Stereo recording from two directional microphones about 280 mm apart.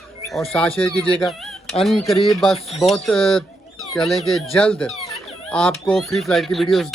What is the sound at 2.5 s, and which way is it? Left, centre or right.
Speech, left.